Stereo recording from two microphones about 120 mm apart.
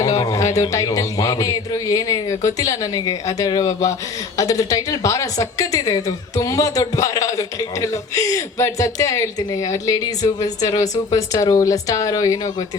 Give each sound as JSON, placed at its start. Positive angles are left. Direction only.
{"t": 0.0, "sound": "a woman's voice", "side_deg": 30}